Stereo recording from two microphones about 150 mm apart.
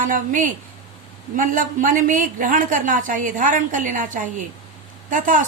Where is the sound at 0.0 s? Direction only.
65° right (ahead or behind).